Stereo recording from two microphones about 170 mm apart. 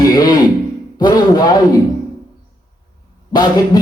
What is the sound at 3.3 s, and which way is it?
Speech, 25° left (ahead or behind).